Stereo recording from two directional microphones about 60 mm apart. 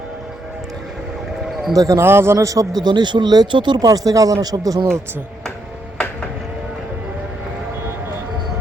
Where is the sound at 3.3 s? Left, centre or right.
Right.